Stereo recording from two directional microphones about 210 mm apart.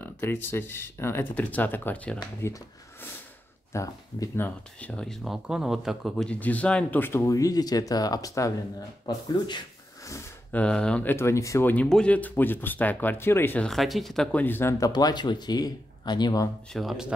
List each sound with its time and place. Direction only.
0.0 s speech: 10° left (ahead or behind)
3.7 s speech: 15° left (ahead or behind)
16.7 s speech: centre (ahead or behind)